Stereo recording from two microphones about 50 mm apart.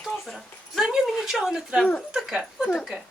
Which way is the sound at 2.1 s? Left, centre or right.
Centre.